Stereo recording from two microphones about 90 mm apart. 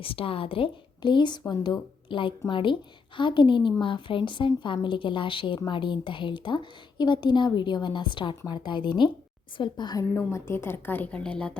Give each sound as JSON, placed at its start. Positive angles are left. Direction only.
{"t": 0.0, "sound": "a woman's voice", "side_deg": 90}
{"t": 9.6, "sound": "a woman's voice", "side_deg": 55}
{"t": 10.0, "sound": "a woman's voice", "side_deg": 30}